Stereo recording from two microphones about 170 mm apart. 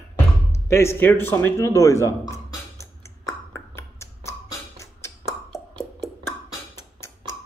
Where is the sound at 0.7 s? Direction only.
15° left (ahead or behind).